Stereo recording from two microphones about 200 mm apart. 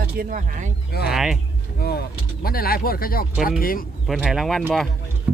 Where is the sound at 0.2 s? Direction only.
45° right (ahead or behind).